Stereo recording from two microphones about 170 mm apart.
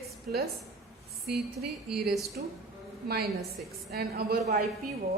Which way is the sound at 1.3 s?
70° right (ahead or behind).